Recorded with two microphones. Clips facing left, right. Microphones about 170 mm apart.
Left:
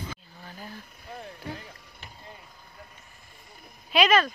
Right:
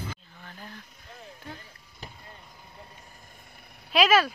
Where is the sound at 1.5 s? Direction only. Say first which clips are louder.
Left 5 dB; 75° left (ahead or behind).